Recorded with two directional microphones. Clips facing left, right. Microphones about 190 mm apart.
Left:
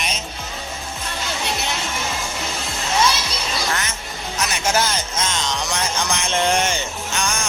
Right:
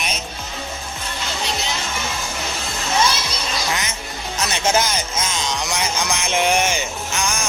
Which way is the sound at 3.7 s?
15° right (ahead or behind).